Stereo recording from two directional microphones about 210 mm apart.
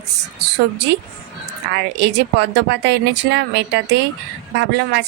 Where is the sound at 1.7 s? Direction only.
55° right (ahead or behind).